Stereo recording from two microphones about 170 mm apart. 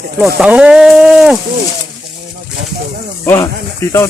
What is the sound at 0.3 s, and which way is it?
Speech, 5° right (ahead or behind).